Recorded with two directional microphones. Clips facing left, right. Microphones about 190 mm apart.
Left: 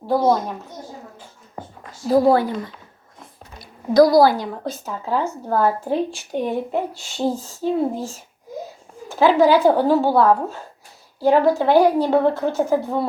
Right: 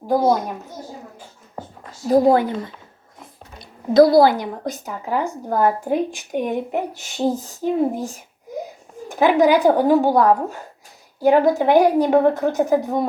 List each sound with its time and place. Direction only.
0.1 s a woman's voice: 10° right (ahead or behind)
2.0 s a woman's voice: 20° right (ahead or behind)